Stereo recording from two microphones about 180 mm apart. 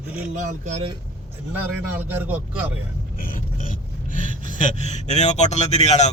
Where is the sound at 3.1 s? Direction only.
50° left (ahead or behind).